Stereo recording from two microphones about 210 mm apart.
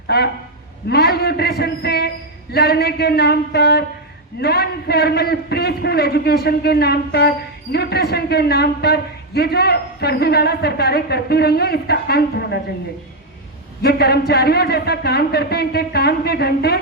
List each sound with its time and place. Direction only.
0.1 s a man's voice: 50° left (ahead or behind)
13.8 s a man's voice: 50° left (ahead or behind)